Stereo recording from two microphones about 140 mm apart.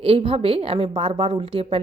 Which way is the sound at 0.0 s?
45° right (ahead or behind).